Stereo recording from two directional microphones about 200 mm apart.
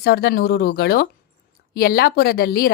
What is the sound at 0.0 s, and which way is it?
A woman's voice, 50° left (ahead or behind).